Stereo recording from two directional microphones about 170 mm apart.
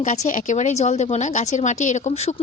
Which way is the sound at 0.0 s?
50° left (ahead or behind).